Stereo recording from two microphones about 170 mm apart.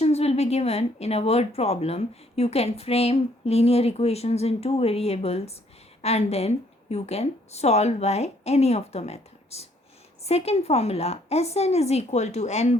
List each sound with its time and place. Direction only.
0.0 s speech: 40° left (ahead or behind)